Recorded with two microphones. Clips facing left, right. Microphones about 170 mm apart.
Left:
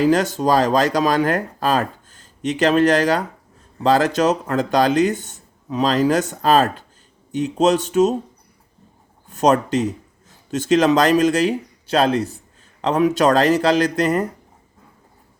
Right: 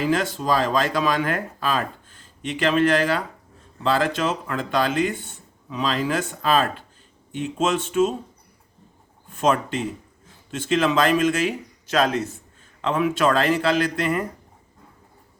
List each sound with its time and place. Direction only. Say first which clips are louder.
0.0 s speech: left 6 dB; 40° left (ahead or behind)
9.3 s speech: left 5 dB; 40° left (ahead or behind)